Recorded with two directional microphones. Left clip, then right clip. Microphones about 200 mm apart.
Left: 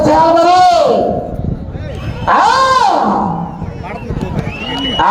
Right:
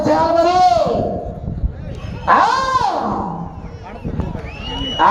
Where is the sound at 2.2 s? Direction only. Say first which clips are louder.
Left 4 dB; 25° left (ahead or behind).